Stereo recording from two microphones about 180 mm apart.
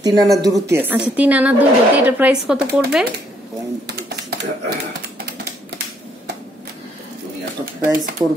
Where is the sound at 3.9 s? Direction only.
65° right (ahead or behind).